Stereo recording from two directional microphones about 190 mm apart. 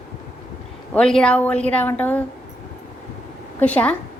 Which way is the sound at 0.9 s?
5° left (ahead or behind).